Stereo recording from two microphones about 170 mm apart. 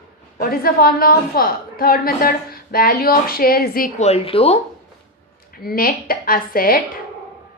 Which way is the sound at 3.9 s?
40° left (ahead or behind).